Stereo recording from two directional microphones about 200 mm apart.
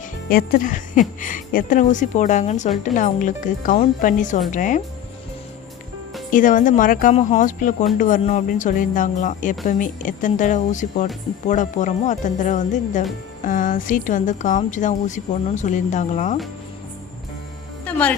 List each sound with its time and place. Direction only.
0.3 s speech: 45° left (ahead or behind)
6.3 s speech: 40° left (ahead or behind)
17.8 s music: 5° left (ahead or behind)